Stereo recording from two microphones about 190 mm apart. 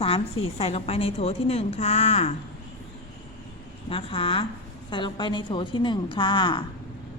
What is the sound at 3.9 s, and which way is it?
A woman's voice, 30° left (ahead or behind).